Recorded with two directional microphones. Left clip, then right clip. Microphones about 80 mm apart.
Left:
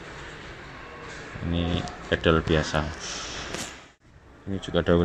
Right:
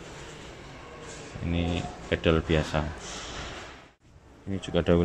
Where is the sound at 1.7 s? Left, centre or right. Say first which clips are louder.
Left 3 dB; right.